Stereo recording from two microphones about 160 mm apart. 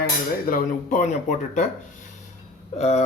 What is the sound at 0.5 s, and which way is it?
Speech, 55° left (ahead or behind).